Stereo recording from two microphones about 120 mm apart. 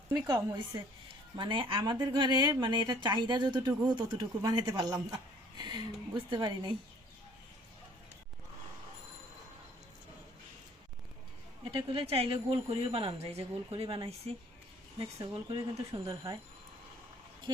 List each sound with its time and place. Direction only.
0.3 s a woman's voice: 30° right (ahead or behind)
1.4 s speech: 45° right (ahead or behind)
11.7 s a woman's voice: 45° right (ahead or behind)
15.2 s speech: 40° right (ahead or behind)